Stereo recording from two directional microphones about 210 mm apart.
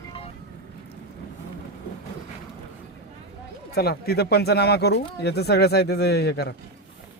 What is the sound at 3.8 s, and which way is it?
Speech, 45° left (ahead or behind).